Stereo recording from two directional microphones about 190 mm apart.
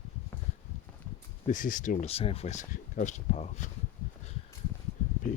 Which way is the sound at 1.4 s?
45° left (ahead or behind).